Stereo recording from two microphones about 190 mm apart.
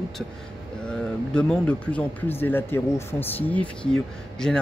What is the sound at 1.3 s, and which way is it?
Speech, 5° left (ahead or behind).